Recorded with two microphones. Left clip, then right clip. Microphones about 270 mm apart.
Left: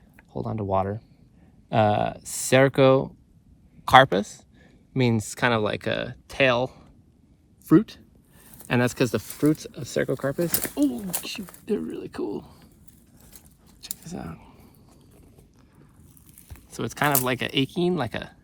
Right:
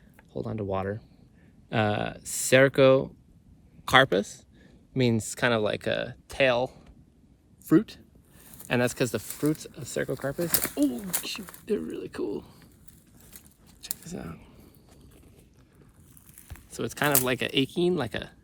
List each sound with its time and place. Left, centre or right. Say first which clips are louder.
0.3 s speech: left 5 dB; centre
10.5 s speech: even; centre
11.2 s speech: left 1 dB; left
14.0 s speech: left 2 dB; left
16.7 s speech: left 2 dB; left